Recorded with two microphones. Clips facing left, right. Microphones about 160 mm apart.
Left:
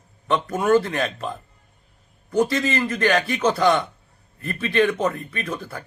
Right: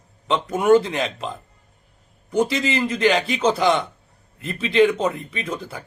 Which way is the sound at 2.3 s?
20° right (ahead or behind).